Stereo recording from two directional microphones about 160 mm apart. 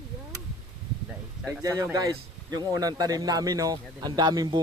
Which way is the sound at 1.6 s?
20° right (ahead or behind).